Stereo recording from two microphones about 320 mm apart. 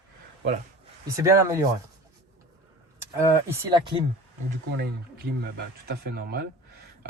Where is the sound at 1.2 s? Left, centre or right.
Centre.